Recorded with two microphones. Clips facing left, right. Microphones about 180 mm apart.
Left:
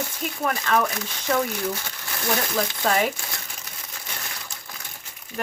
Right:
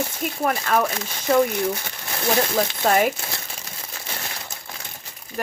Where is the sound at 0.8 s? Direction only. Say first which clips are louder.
Right 2 dB; 30° right (ahead or behind).